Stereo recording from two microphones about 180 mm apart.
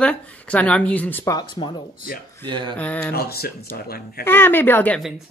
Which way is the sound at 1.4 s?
25° left (ahead or behind).